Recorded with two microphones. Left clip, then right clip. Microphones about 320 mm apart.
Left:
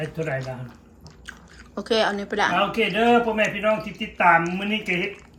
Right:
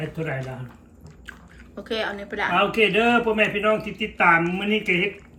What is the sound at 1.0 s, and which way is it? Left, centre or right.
Chewing, centre.